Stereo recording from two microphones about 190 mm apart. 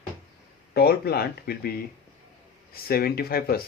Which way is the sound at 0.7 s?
55° left (ahead or behind).